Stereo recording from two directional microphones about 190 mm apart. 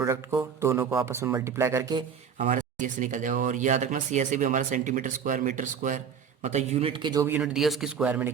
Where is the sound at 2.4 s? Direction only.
40° right (ahead or behind).